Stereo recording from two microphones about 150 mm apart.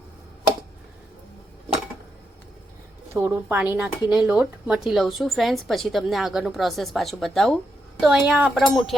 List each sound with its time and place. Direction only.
3.1 s a woman's voice: 15° right (ahead or behind); by 9.0 s centre (ahead or behind)